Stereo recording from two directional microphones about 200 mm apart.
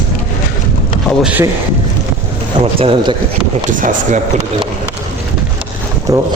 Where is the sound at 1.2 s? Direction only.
5° right (ahead or behind).